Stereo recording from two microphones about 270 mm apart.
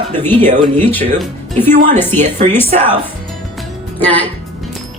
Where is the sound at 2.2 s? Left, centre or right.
Right.